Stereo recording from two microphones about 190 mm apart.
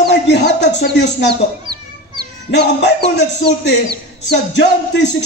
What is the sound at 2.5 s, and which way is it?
A man's voice, 65° left (ahead or behind).